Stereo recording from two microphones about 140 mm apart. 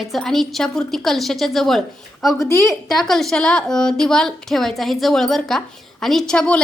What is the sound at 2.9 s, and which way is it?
A woman's voice, centre (ahead or behind).